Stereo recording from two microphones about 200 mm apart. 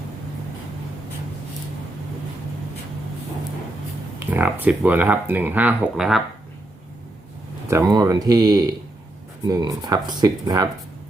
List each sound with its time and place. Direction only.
4.3 s speech: 10° right (ahead or behind)
7.7 s speech: 15° right (ahead or behind)